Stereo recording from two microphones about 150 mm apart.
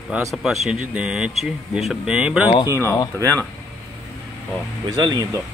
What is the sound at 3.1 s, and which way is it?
Speech, 20° right (ahead or behind).